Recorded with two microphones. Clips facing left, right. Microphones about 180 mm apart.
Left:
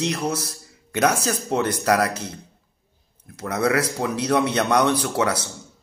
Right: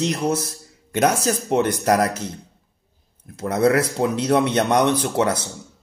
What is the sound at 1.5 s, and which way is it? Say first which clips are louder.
Speech: right 3 dB; 60° right (ahead or behind).